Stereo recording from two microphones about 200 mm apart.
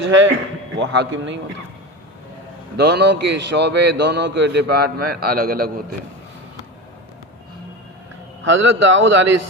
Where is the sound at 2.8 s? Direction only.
55° right (ahead or behind).